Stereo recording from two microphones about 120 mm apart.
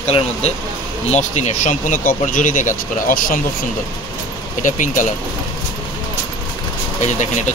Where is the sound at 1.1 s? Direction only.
80° left.